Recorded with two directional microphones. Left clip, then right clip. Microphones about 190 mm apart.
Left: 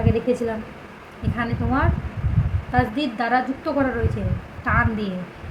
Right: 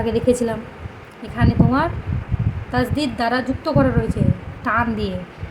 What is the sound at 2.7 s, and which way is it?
A woman's voice, 15° right (ahead or behind).